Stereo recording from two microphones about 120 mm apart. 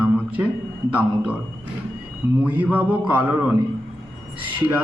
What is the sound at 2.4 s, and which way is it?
Speech, 15° right (ahead or behind).